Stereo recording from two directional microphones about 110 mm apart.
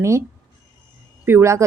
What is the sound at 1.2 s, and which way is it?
Speech, 25° right (ahead or behind).